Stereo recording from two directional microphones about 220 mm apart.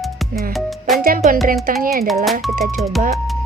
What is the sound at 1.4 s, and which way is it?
Speech, 40° right (ahead or behind).